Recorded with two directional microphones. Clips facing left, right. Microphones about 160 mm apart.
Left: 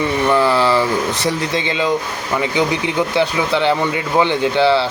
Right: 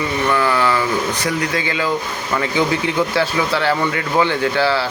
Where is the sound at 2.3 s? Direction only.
20° left (ahead or behind).